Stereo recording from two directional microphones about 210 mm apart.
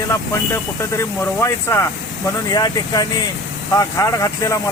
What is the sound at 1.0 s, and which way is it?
Speech, 15° left (ahead or behind).